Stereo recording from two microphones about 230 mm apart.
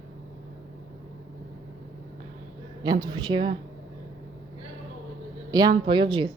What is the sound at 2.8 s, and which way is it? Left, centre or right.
Speech, centre.